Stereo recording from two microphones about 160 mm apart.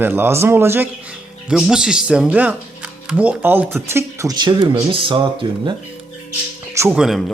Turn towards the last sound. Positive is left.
turn(degrees=0)  # may be behind; listen again after turning